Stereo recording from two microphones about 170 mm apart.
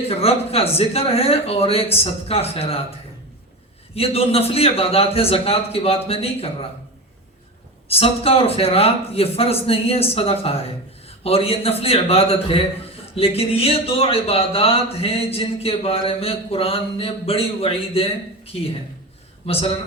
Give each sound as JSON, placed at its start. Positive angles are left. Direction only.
{"t": 0.1, "sound": "speech", "side_deg": 35}
{"t": 3.9, "sound": "speech", "side_deg": 35}
{"t": 7.9, "sound": "speech", "side_deg": 35}